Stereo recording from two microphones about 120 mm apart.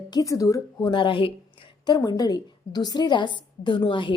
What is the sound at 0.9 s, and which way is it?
Speech, 45° left (ahead or behind).